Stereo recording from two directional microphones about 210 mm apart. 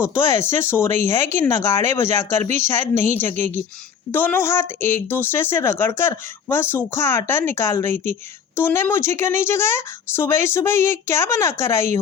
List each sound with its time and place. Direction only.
0.0 s speech: 10° left (ahead or behind)
2.9 s a woman's voice: 35° right (ahead or behind)
4.1 s speech: 10° left (ahead or behind)